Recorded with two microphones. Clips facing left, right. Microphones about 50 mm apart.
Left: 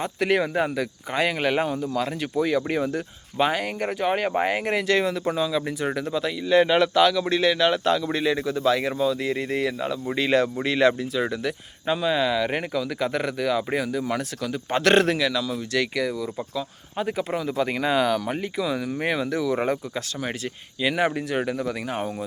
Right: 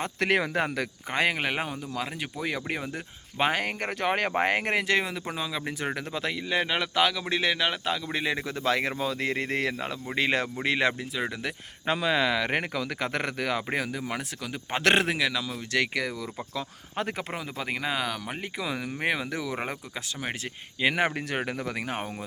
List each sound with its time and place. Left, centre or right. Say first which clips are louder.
0.2 s speech: left 3 dB; right
1.1 s speech: left 2 dB; right
1.4 s a man's voice: left 6 dB; centre
3.5 s speech: left 3 dB; right
4.3 s speech: left 2 dB; right
4.7 s a man's voice: left 4 dB; right
6.6 s speech: left 11 dB; centre
6.9 s a man's voice: left 6 dB; right
7.7 s a man's voice: left 7 dB; centre
11.9 s a man's voice: left 2 dB; right
17.3 s speech: left 8 dB; centre
18.5 s a man's voice: left 4 dB; right
20.8 s speech: left 2 dB; right